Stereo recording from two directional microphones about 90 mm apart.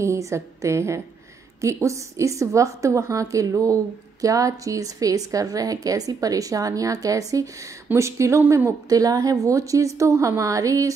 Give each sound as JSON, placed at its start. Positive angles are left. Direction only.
{"t": 0.0, "sound": "a woman's voice", "side_deg": -35}